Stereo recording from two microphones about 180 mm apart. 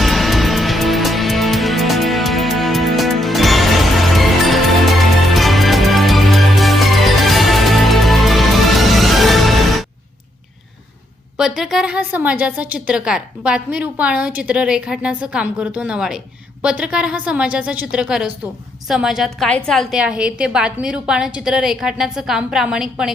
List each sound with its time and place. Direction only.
0.0 s music: centre (ahead or behind)
11.3 s a woman's voice: 5° right (ahead or behind)